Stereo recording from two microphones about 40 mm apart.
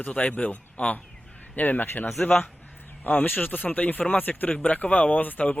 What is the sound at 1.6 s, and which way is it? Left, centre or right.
Speech, left.